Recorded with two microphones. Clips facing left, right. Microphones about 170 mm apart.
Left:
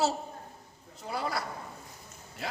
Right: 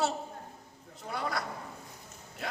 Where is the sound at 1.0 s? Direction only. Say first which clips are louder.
Left 2 dB; 30° left (ahead or behind).